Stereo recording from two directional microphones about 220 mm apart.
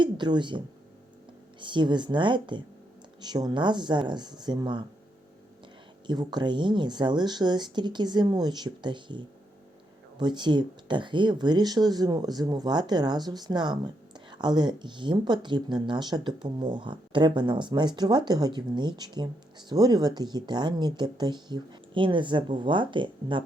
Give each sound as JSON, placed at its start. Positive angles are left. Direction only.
{"t": 0.0, "sound": "speech", "side_deg": -20}
{"t": 1.6, "sound": "speech", "side_deg": -20}
{"t": 6.1, "sound": "speech", "side_deg": -20}